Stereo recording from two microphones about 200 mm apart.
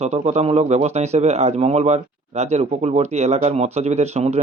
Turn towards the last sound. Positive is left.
turn(degrees=-30)  # may be behind; listen again after turning